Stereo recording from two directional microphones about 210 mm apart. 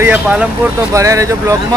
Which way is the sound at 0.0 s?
5° right (ahead or behind).